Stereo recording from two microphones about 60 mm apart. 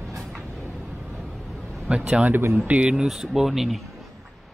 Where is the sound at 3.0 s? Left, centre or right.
Centre.